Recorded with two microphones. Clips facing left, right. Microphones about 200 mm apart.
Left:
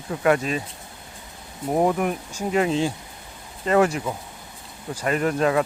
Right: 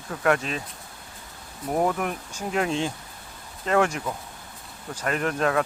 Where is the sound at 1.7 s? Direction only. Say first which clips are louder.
Left 3 dB; 15° left (ahead or behind).